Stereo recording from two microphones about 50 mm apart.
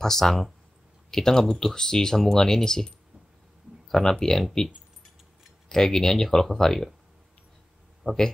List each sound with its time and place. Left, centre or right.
0.0 s speech: centre
3.9 s speech: centre
5.7 s speech: centre
8.0 s speech: centre